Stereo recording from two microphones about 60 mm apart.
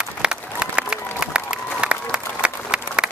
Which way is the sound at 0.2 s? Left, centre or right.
Centre.